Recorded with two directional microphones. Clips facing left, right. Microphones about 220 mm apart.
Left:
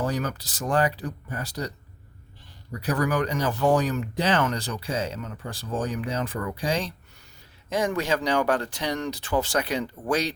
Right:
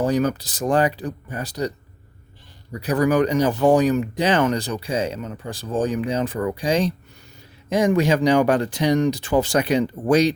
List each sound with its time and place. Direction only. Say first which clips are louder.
0.0 s speech: right 8 dB; 20° right (ahead or behind)
2.8 s speech: right 7 dB; 20° right (ahead or behind)